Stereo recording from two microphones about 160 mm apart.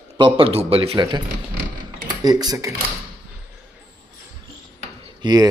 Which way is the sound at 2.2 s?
25° right (ahead or behind).